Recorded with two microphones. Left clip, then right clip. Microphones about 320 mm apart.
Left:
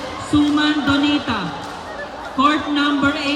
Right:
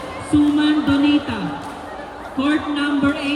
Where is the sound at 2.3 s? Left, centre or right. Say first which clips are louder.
Left 4 dB; centre.